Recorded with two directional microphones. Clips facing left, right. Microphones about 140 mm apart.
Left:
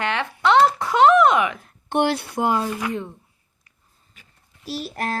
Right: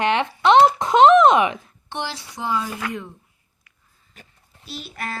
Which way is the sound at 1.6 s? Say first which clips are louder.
Left 10 dB; 55° left (ahead or behind).